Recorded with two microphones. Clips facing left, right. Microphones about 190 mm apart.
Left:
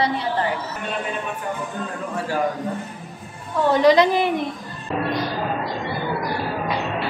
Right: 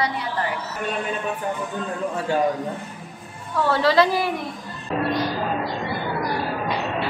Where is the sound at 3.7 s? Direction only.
20° left (ahead or behind).